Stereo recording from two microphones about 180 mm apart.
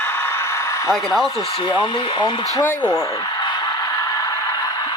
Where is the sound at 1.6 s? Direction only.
25° left (ahead or behind).